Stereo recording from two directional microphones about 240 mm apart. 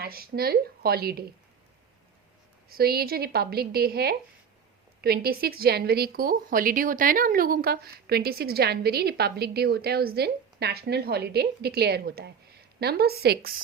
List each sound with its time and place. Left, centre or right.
0.0 s a woman's voice: right
2.6 s a woman's voice: right